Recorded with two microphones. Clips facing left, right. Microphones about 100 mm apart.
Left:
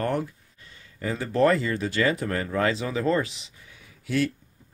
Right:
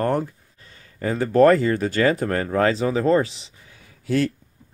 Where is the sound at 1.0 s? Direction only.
45° right (ahead or behind).